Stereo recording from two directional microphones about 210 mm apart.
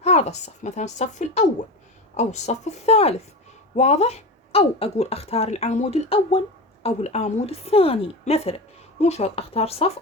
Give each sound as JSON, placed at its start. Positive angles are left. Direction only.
{"t": 0.0, "sound": "a woman's voice", "side_deg": 30}